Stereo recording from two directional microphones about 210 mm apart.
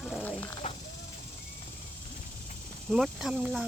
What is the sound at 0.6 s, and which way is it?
Speech, 35° left (ahead or behind).